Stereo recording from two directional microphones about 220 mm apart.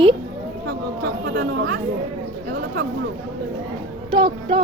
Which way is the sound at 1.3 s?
45° right (ahead or behind).